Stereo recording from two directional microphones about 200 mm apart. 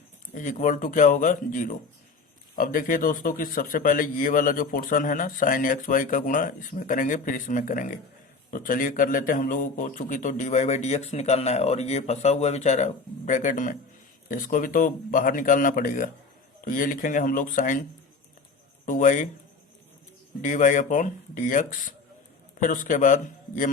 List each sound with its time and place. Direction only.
0.3 s a man's voice: 40° left (ahead or behind)
18.9 s a man's voice: 40° left (ahead or behind)
20.4 s a man's voice: 40° left (ahead or behind)